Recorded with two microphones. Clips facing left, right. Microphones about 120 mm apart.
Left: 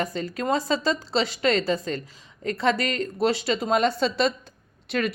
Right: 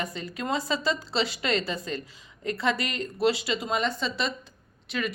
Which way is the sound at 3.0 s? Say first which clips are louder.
Right 1 dB; 40° left (ahead or behind).